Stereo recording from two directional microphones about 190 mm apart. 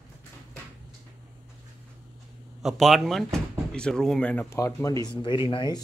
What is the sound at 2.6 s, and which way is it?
Speech, centre (ahead or behind).